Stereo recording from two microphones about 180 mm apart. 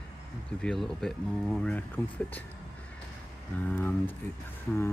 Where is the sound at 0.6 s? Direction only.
Centre (ahead or behind).